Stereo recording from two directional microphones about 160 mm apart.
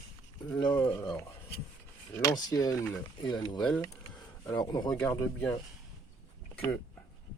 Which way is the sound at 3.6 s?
5° left (ahead or behind).